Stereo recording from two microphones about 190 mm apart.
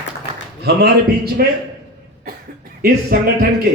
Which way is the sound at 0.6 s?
55° right (ahead or behind).